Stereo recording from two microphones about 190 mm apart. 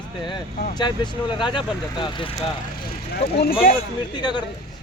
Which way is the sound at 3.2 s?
55° left (ahead or behind).